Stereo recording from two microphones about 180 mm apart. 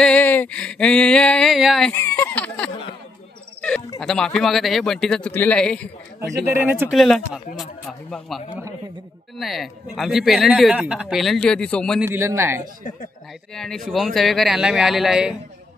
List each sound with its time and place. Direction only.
0.0 s speech: 5° left (ahead or behind)
2.0 s speech: 15° left (ahead or behind)
4.0 s speech: centre (ahead or behind)
6.2 s speech: 10° right (ahead or behind)
7.0 s speech: centre (ahead or behind)
12.0 s speech: 15° right (ahead or behind)
13.5 s speech: 5° left (ahead or behind)